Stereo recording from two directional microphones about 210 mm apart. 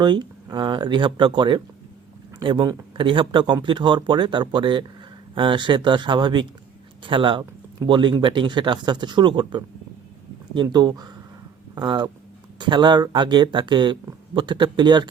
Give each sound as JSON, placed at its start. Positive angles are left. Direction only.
{"t": 0.0, "sound": "speech", "side_deg": -20}